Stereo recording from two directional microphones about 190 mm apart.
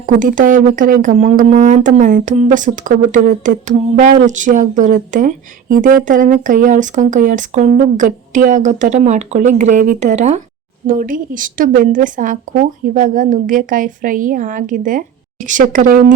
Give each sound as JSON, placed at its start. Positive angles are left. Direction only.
{"t": 0.0, "sound": "speech", "side_deg": -45}